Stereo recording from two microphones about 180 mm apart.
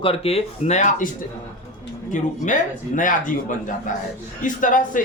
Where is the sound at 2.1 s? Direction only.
45° left (ahead or behind).